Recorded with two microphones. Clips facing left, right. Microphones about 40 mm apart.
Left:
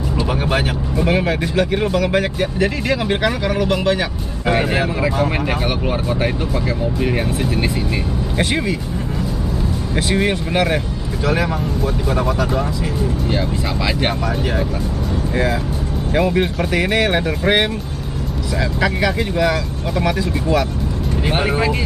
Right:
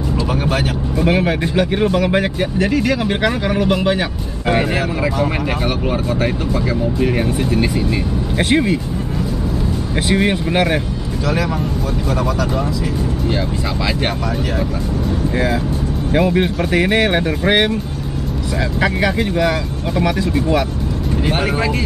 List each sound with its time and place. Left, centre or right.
1.0 s speech: centre
2.6 s speech: centre
3.2 s speech: centre
7.0 s speech: centre
8.4 s speech: right
10.1 s speech: centre
16.1 s speech: centre
18.8 s speech: centre
21.3 s speech: centre